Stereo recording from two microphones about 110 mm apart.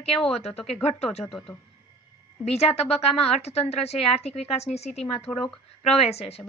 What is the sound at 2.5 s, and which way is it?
A woman's voice, 75° left (ahead or behind).